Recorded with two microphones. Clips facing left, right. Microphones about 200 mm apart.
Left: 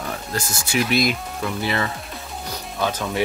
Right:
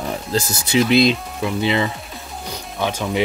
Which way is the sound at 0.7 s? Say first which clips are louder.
Right 6 dB; 25° right (ahead or behind).